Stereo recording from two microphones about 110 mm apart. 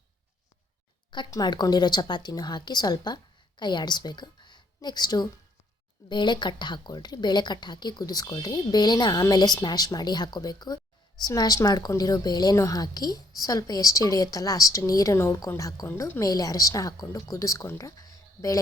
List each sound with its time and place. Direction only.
1.3 s a woman's voice: 40° left (ahead or behind)